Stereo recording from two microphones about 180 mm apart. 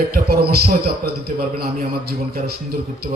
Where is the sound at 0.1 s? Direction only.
60° right (ahead or behind).